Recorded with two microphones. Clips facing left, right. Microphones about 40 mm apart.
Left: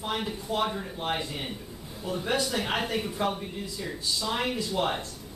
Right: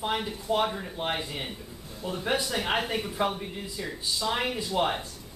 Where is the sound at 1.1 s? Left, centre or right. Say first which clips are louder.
Left 1 dB; centre.